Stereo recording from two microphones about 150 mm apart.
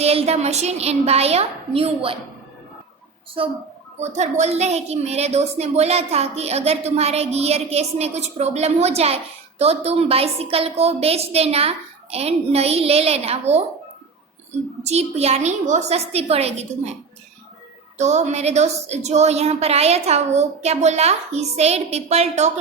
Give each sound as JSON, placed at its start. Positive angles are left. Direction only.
{"t": 0.0, "sound": "a woman's voice", "side_deg": -45}
{"t": 4.0, "sound": "a woman's voice", "side_deg": -50}
{"t": 14.8, "sound": "a woman's voice", "side_deg": -45}
{"t": 17.9, "sound": "a woman's voice", "side_deg": -50}